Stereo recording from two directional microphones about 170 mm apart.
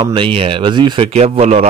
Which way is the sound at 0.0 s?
30° right (ahead or behind).